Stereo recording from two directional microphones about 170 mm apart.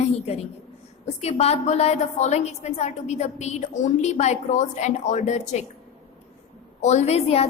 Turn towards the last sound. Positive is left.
turn(degrees=40)  # may be behind; listen again after turning